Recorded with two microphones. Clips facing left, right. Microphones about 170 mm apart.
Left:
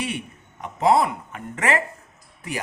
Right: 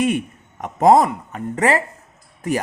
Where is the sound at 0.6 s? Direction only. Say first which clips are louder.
Right 5 dB; 45° right (ahead or behind).